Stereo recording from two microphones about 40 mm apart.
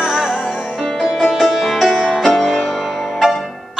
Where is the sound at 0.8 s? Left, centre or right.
Centre.